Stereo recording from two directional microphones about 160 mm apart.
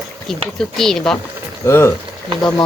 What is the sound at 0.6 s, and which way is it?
Speech, centre (ahead or behind).